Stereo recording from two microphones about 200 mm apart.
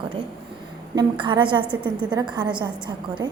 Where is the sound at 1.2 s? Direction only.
25° right (ahead or behind).